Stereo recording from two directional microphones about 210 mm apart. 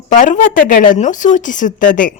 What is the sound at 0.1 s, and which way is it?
A woman's voice, 40° left (ahead or behind).